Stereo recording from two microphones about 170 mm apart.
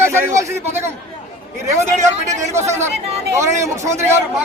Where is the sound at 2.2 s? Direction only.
15° right (ahead or behind).